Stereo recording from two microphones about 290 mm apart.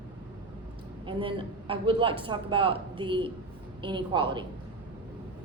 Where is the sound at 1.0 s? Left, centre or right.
Centre.